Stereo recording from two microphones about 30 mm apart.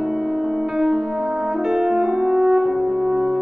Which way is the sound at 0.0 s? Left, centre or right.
Centre.